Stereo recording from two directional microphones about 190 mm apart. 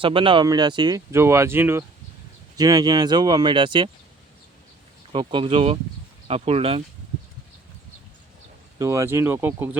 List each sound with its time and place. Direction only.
0.0 s speech: 25° right (ahead or behind)
5.1 s speech: 25° right (ahead or behind)
8.8 s speech: 15° right (ahead or behind)